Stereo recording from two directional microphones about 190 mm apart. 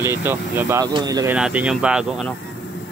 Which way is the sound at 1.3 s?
5° right (ahead or behind).